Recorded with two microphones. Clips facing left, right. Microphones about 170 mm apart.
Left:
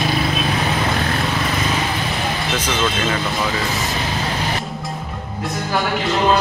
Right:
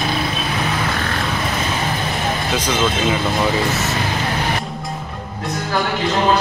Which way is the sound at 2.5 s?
10° right (ahead or behind).